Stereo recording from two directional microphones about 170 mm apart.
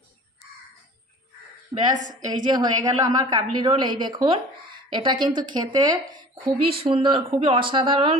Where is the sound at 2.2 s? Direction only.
25° right (ahead or behind).